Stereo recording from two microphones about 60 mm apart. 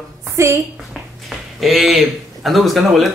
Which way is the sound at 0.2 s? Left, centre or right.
Right.